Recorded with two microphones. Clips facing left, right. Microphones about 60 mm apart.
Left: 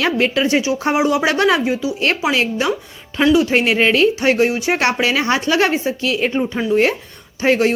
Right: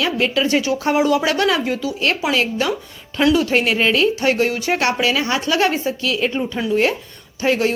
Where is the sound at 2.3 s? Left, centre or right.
Left.